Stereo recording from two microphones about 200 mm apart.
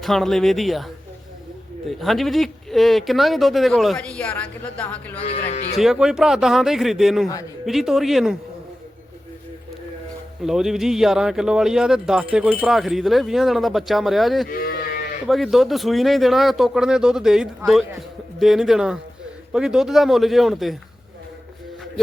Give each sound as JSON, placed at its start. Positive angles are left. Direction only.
{"t": 0.0, "sound": "a man's voice", "side_deg": 0}
{"t": 1.9, "sound": "a man's voice", "side_deg": 0}
{"t": 5.1, "sound": "speech", "side_deg": 30}
{"t": 5.8, "sound": "a man's voice", "side_deg": -5}
{"t": 10.4, "sound": "a man's voice", "side_deg": 0}
{"t": 14.4, "sound": "livestock", "side_deg": 45}
{"t": 15.3, "sound": "a man's voice", "side_deg": 0}